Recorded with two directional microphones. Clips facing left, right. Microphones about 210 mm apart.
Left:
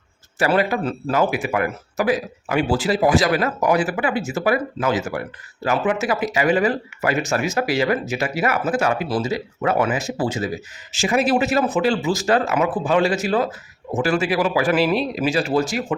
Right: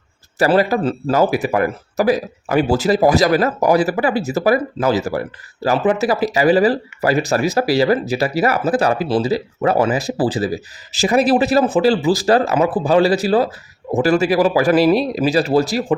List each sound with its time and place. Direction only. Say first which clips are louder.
0.3 s speech: right 4 dB; 35° right (ahead or behind)